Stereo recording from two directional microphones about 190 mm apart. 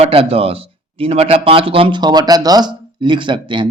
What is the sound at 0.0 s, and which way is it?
Speech, 30° right (ahead or behind).